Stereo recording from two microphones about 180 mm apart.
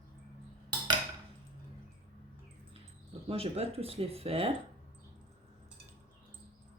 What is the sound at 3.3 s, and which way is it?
Speech, 35° right (ahead or behind).